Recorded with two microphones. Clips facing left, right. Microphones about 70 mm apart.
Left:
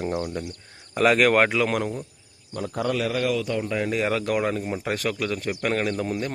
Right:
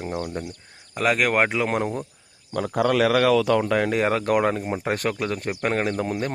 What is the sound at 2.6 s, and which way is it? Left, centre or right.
Speech, right.